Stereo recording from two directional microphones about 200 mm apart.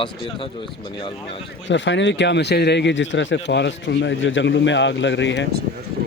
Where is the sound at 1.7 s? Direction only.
65° left (ahead or behind).